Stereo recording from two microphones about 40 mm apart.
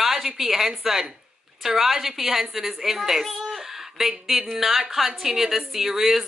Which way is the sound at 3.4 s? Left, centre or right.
Centre.